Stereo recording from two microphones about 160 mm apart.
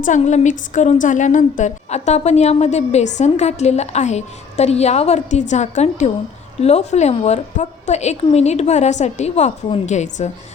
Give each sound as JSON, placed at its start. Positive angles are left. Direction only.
{"t": 0.0, "sound": "speech", "side_deg": 50}